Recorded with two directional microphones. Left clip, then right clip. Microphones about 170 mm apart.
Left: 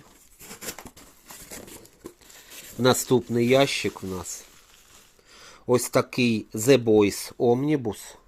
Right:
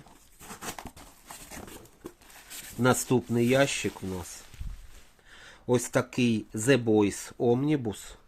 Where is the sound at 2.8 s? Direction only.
15° left (ahead or behind).